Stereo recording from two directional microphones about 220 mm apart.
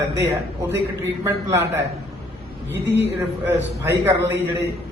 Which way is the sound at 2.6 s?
50° right (ahead or behind).